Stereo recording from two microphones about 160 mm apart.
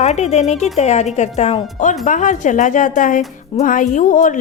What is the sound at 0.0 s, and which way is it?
A woman's voice, 45° left (ahead or behind).